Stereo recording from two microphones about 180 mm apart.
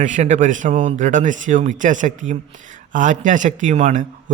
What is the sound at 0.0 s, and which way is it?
A man's voice, 45° right (ahead or behind).